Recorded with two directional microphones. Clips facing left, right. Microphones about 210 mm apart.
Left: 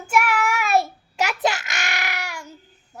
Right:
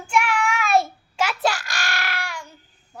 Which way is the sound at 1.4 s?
20° left (ahead or behind).